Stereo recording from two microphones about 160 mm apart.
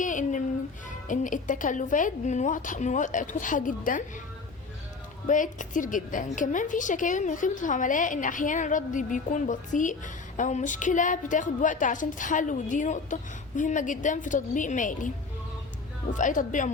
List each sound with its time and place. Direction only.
0.0 s music: 55° left (ahead or behind)
1.0 s a woman's voice: 55° left (ahead or behind)
5.3 s a woman's voice: 55° left (ahead or behind)
16.1 s a woman's voice: 55° left (ahead or behind)